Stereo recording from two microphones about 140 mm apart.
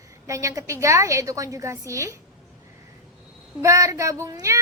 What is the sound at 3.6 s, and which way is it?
A woman's voice, 25° right (ahead or behind).